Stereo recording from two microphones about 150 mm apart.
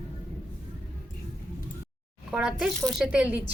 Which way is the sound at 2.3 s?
5° right (ahead or behind).